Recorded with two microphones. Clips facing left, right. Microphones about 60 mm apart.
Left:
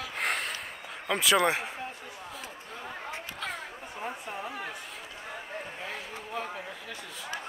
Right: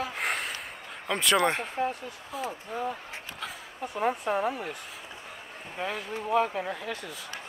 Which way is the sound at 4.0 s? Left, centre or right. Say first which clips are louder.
Right 10 dB; right.